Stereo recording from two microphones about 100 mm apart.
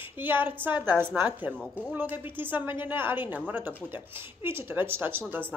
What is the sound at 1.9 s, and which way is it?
Speech, 20° right (ahead or behind).